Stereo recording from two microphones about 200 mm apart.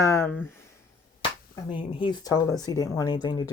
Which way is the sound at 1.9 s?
25° left (ahead or behind).